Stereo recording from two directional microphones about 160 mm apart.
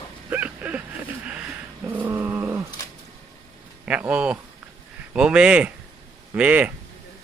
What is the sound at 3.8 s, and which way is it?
Speech, 10° right (ahead or behind).